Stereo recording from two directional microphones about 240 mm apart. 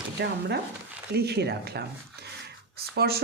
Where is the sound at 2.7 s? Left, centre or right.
Right.